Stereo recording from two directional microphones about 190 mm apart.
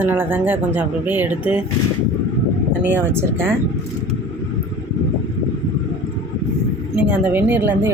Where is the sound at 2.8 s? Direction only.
10° right (ahead or behind).